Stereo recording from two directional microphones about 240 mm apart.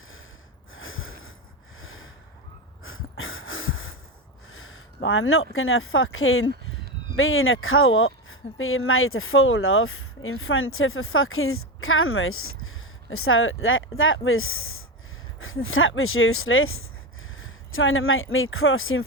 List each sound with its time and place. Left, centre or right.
0.7 s snort: left
1.8 s a sound: left
2.8 s wheeze: left
4.5 s speech: left